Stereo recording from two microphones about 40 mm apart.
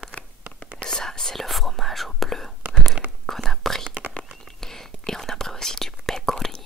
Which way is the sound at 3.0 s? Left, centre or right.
Right.